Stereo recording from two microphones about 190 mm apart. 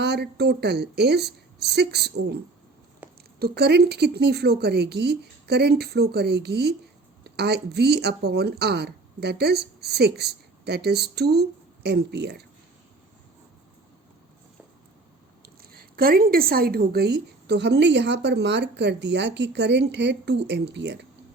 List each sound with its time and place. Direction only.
0.0 s speech: 60° right (ahead or behind)
3.0 s a sound: 10° right (ahead or behind)
3.3 s speech: 55° right (ahead or behind)
15.6 s speech: 50° right (ahead or behind)